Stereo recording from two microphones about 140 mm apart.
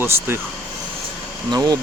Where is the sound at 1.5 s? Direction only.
30° right (ahead or behind).